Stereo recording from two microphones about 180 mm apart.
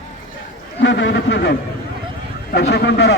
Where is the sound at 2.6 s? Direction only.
65° left (ahead or behind).